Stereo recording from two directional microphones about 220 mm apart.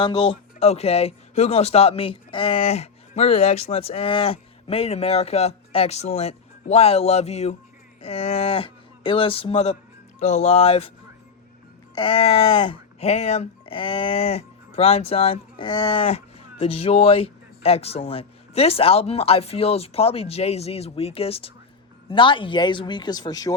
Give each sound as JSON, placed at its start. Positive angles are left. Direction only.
{"t": 0.0, "sound": "speech", "side_deg": 20}
{"t": 11.9, "sound": "speech", "side_deg": 25}